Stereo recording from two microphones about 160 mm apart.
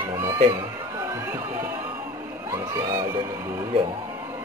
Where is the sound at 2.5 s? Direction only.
20° right (ahead or behind).